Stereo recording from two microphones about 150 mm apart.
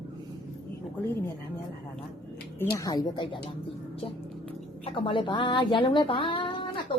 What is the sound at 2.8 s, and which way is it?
Speech, 25° left (ahead or behind).